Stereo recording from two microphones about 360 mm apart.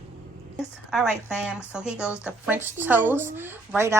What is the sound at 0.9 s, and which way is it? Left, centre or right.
A woman's voice, centre.